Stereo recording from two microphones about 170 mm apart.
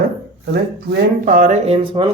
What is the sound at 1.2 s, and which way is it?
Speech, 50° right (ahead or behind).